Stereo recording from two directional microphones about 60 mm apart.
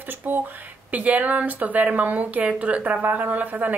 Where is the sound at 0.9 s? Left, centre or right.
Right.